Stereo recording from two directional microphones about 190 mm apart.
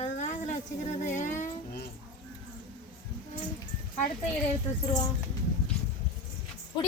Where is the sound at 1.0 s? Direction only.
40° left (ahead or behind).